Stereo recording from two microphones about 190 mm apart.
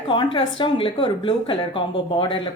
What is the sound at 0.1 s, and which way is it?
Speech, 25° left (ahead or behind).